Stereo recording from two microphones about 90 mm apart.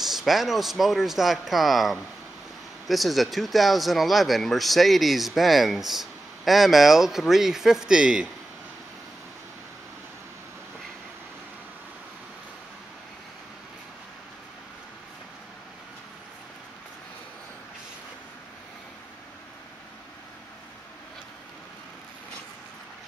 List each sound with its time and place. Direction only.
0.0 s speech: 5° right (ahead or behind)